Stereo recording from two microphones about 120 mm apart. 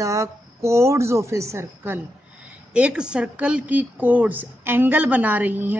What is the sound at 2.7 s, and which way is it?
Speech, 10° right (ahead or behind).